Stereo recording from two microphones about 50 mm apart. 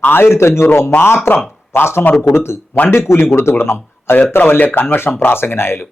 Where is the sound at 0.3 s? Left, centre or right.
Left.